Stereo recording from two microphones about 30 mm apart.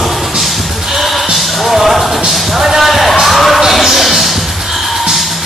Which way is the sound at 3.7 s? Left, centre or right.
Centre.